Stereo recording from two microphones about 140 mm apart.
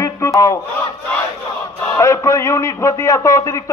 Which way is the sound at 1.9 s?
20° left (ahead or behind).